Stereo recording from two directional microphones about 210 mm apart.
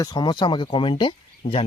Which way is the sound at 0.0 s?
20° left (ahead or behind).